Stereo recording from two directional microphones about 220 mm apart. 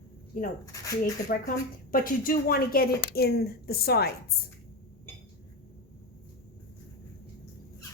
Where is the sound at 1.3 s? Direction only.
40° left (ahead or behind).